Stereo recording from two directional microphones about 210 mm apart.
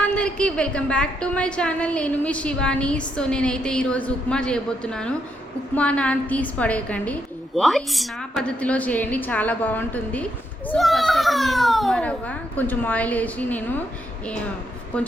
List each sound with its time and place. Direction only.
0.0 s a woman's voice: 5° left (ahead or behind)
14.9 s a woman's voice: 5° left (ahead or behind)